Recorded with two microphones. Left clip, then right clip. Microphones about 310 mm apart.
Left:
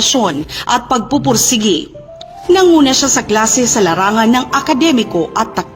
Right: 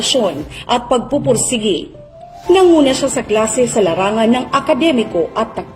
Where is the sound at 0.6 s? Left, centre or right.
Left.